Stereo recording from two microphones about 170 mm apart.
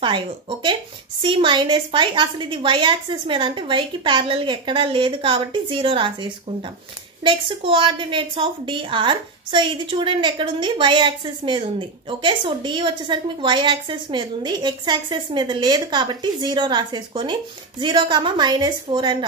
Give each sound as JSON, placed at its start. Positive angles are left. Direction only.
{"t": 0.0, "sound": "a woman's voice", "side_deg": -30}